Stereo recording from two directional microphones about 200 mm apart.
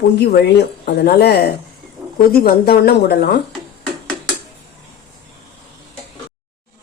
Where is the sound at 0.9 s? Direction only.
50° left (ahead or behind).